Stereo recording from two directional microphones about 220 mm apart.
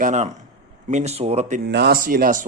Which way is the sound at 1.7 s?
45° right (ahead or behind).